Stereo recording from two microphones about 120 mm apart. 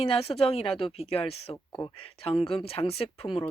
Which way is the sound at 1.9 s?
55° left (ahead or behind).